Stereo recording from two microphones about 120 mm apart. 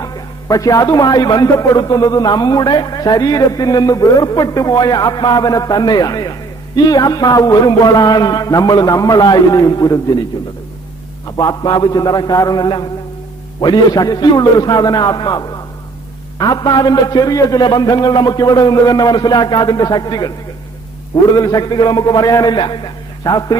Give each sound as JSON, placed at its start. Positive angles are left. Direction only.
{"t": 0.0, "sound": "a man's voice", "side_deg": 30}
{"t": 11.3, "sound": "a man's voice", "side_deg": 35}